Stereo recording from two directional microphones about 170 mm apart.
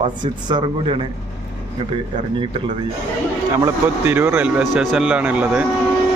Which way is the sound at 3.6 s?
15° right (ahead or behind).